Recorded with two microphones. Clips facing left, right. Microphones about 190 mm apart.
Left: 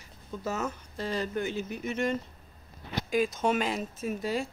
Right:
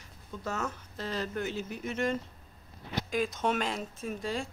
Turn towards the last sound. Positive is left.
turn(degrees=5)  # may be behind; listen again after turning